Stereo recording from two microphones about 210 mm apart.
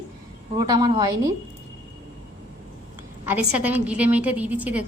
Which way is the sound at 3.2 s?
5° right (ahead or behind).